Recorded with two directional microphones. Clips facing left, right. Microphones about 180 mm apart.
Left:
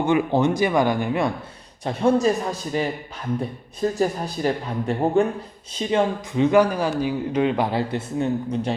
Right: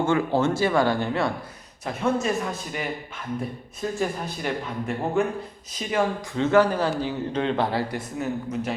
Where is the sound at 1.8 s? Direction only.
30° left (ahead or behind).